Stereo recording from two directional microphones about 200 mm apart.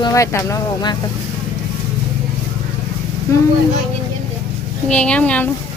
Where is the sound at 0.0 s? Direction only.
15° left (ahead or behind).